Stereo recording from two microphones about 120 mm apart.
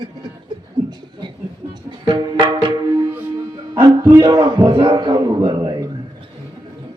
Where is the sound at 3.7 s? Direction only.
30° right (ahead or behind).